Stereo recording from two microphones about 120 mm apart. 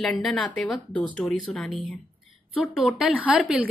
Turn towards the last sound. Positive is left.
turn(degrees=-10)  # may be behind; listen again after turning